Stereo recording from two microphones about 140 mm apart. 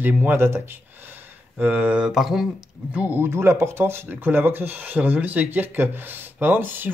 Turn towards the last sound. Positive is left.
turn(degrees=-15)  # may be behind; listen again after turning